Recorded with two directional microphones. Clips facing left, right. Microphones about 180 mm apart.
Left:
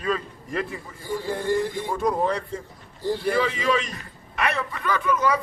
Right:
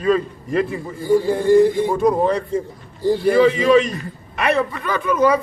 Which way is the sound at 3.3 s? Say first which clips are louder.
Right 12 dB; 25° right (ahead or behind).